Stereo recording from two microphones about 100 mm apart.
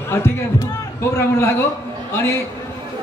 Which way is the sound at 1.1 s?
25° left (ahead or behind).